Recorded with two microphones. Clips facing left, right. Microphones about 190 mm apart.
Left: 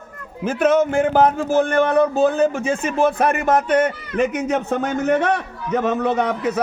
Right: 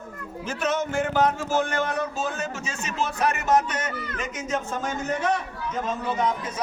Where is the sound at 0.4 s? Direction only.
55° left (ahead or behind).